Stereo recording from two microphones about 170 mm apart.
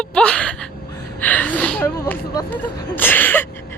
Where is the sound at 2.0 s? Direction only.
15° left (ahead or behind).